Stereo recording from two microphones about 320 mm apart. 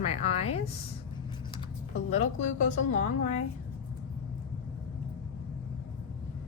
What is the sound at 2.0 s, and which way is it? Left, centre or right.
Speech, left.